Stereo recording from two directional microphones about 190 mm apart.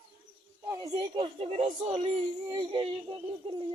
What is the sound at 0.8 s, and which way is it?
Speech, 25° right (ahead or behind).